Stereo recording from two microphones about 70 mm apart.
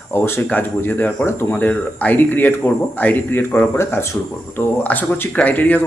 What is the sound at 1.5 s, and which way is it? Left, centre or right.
Speech, left.